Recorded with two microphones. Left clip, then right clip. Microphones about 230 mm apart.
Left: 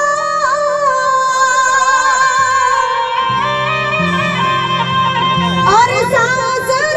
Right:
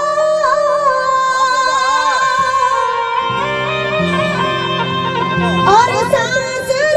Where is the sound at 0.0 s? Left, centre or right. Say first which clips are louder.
Right 1 dB; left.